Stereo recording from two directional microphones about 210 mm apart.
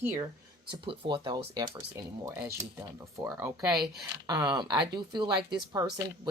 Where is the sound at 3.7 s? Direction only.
Centre (ahead or behind).